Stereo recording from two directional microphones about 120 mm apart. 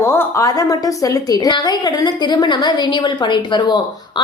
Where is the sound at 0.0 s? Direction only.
20° left (ahead or behind).